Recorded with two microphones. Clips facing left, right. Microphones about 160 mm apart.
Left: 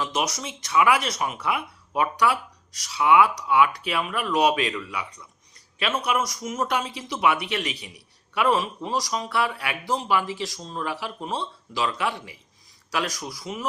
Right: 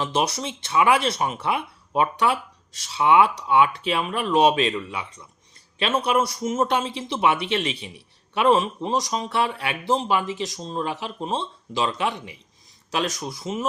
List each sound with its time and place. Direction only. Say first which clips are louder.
0.0 s a man's voice: right 3 dB; 30° right (ahead or behind)